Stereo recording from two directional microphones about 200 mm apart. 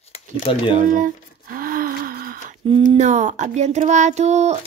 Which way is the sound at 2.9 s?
35° right (ahead or behind).